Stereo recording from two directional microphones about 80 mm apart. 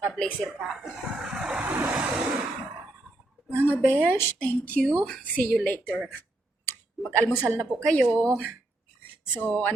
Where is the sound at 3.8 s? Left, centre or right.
Left.